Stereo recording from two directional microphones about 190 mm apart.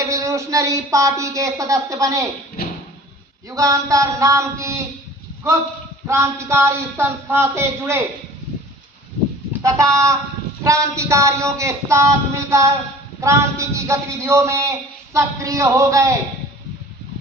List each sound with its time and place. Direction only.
0.0 s a man's voice: 15° right (ahead or behind)
2.6 s a sound: 55° left (ahead or behind)
3.5 s a man's voice: 15° right (ahead or behind)
6.1 s a man's voice: 15° right (ahead or behind)
9.5 s a man's voice: 15° right (ahead or behind)